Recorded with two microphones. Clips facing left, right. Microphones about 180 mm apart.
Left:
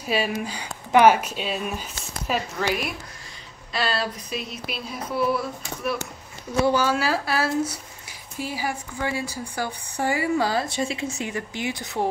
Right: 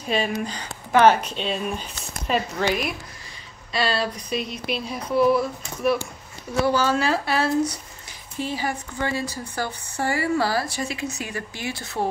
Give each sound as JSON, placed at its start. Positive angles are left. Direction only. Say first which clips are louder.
{"t": 0.0, "sound": "speech", "louder": "right 1 dB", "side_deg": 5}
{"t": 3.7, "sound": "a sound", "louder": "right 2 dB", "side_deg": 0}
{"t": 6.6, "sound": "speech", "louder": "even", "side_deg": 15}